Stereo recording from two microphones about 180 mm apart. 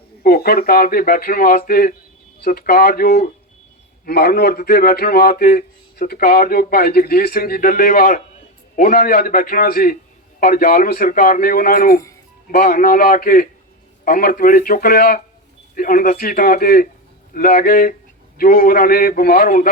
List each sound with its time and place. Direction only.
0.2 s a man's voice: 55° left (ahead or behind)